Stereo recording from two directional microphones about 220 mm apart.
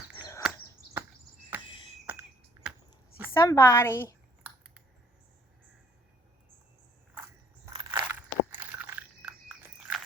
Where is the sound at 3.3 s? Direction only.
10° left (ahead or behind).